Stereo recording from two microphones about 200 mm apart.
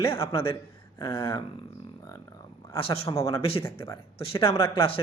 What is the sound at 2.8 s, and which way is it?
Speech, 30° left (ahead or behind).